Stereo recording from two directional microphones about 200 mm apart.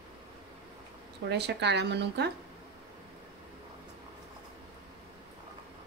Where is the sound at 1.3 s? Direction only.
55° right (ahead or behind).